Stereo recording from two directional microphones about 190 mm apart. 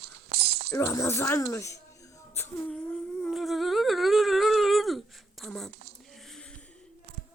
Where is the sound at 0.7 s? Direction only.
15° left (ahead or behind).